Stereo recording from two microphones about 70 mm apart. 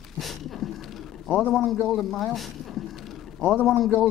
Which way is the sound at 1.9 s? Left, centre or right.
Centre.